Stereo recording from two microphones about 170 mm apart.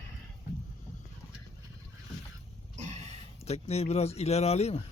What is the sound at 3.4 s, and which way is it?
Speech, 40° left (ahead or behind).